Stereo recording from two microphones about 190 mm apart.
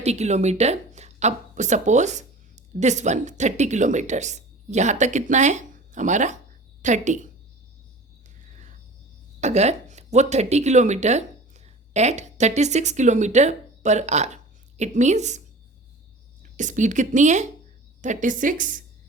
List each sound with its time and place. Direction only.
0.0 s a woman's voice: 35° right (ahead or behind)
9.4 s a woman's voice: 35° right (ahead or behind)